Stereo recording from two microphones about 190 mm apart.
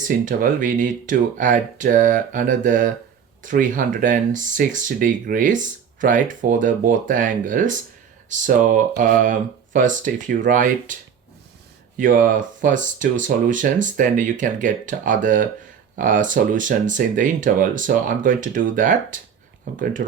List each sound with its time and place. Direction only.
0.3 s speech: 45° right (ahead or behind)
11.9 s speech: 45° right (ahead or behind)